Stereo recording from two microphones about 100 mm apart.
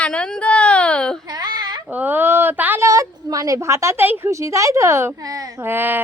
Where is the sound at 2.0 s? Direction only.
20° right (ahead or behind).